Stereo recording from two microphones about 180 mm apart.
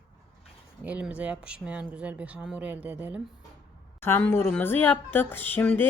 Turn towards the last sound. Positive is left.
turn(degrees=10)  # may be behind; listen again after turning